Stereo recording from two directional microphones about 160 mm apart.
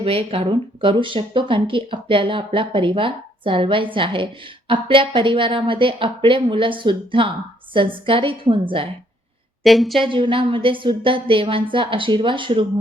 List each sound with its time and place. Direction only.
0.0 s speech: 35° right (ahead or behind)
9.6 s a woman's voice: centre (ahead or behind)
10.0 s speech: 30° right (ahead or behind)